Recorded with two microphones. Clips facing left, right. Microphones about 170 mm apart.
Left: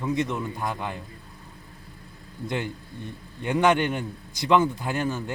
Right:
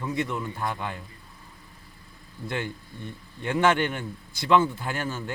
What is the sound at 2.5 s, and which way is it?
Speech, 20° left (ahead or behind).